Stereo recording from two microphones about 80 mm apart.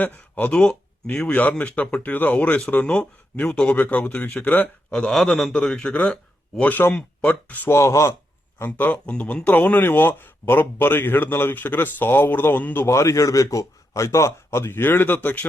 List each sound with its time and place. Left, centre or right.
0.0 s a man's voice: left; by 5.5 s centre
5.5 s speech: centre
7.7 s a man's voice: left
12.8 s a man's voice: left